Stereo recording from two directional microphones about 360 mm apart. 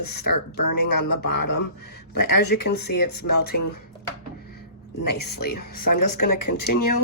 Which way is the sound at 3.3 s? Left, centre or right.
Left.